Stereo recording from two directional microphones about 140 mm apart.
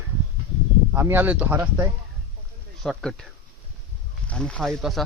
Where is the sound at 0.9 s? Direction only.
15° right (ahead or behind).